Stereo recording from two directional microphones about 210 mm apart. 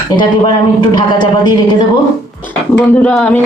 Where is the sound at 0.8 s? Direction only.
20° left (ahead or behind).